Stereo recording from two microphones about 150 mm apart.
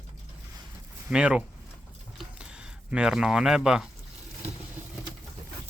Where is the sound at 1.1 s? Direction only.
5° right (ahead or behind).